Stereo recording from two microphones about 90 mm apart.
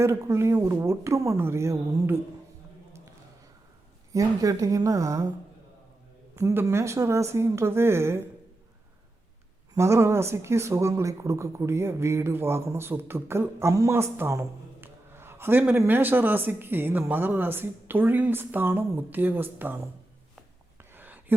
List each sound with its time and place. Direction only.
0.0 s a woman's voice: 30° right (ahead or behind)
4.1 s a woman's voice: 40° right (ahead or behind)
6.3 s speech: 25° right (ahead or behind)
9.7 s speech: 30° right (ahead or behind)
20.9 s a sound: 20° right (ahead or behind)